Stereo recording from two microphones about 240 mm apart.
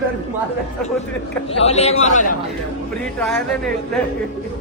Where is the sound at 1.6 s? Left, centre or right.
Left.